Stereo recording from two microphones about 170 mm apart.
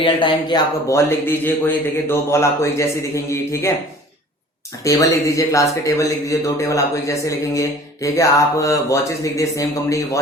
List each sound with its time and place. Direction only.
0.0 s speech: 30° left (ahead or behind)
4.8 s a man's voice: 20° left (ahead or behind)